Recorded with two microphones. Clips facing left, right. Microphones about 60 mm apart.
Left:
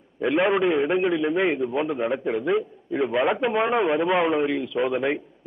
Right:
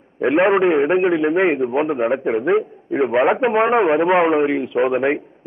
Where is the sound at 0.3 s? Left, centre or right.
Right.